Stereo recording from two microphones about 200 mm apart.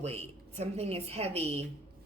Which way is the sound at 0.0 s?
30° right (ahead or behind).